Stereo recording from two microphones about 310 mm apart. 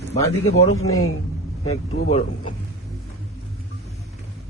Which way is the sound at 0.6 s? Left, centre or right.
Left.